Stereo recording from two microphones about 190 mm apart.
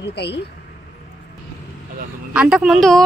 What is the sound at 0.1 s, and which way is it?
Speech, 60° left (ahead or behind).